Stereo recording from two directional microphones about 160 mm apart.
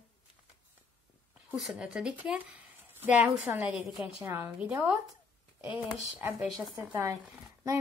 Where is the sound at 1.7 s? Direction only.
5° right (ahead or behind).